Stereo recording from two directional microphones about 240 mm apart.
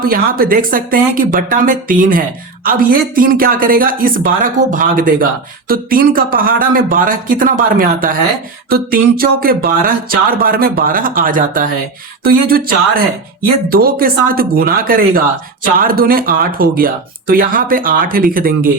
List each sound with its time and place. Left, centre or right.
0.0 s speech: right